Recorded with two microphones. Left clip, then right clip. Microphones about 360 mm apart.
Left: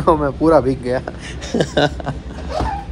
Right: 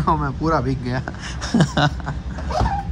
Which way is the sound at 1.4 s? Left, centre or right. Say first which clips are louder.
Left 3 dB; centre.